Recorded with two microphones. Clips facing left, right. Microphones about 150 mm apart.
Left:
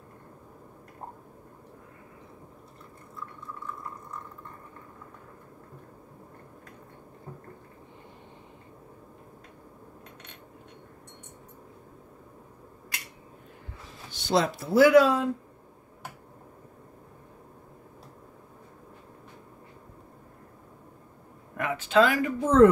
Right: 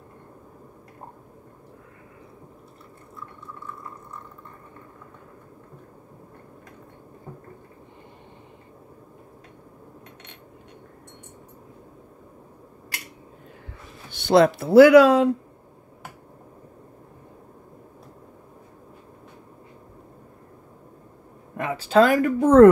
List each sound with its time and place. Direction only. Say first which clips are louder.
14.1 s speech: right 9 dB; 60° right (ahead or behind); by 15.2 s 80° right
21.5 s speech: right 4 dB; 30° right (ahead or behind); by 22.7 s 55° right (ahead or behind)